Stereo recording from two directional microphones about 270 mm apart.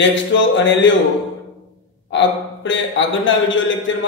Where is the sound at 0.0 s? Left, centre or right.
Left.